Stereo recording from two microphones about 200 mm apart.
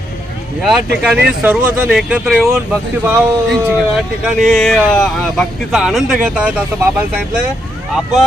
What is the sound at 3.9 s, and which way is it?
Speech, centre (ahead or behind).